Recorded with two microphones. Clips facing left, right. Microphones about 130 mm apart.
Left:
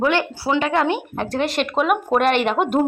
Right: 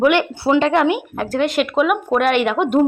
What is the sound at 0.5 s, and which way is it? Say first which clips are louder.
Speech: right 4 dB; 30° right (ahead or behind).